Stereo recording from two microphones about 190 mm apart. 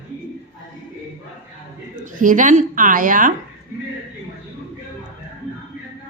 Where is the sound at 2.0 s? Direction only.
45° right (ahead or behind).